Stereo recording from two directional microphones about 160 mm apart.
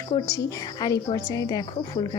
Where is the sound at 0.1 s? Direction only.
25° left (ahead or behind).